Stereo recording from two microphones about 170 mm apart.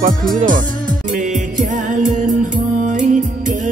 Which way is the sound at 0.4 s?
50° right (ahead or behind).